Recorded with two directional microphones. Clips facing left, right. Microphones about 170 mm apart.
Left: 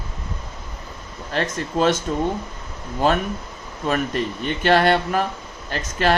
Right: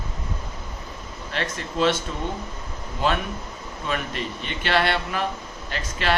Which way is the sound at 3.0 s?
45° left (ahead or behind).